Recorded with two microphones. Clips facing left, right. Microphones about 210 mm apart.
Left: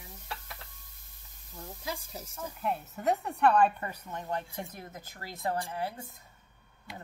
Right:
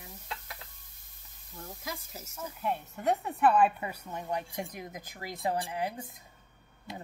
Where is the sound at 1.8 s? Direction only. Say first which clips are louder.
Left 4 dB; 30° left (ahead or behind).